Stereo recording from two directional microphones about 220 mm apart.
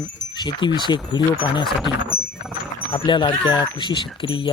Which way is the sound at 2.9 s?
20° left (ahead or behind).